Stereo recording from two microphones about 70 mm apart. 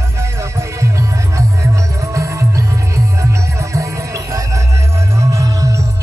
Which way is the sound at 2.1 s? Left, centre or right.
Right.